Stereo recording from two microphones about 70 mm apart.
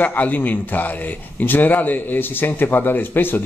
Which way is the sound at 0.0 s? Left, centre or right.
Left.